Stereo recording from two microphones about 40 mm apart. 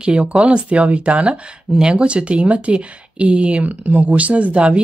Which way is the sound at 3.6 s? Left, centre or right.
Right.